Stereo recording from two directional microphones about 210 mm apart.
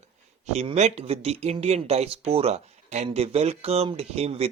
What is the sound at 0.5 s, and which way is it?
Speech, 30° right (ahead or behind).